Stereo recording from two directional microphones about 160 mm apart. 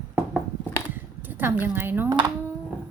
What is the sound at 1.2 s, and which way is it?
Speech, 10° right (ahead or behind).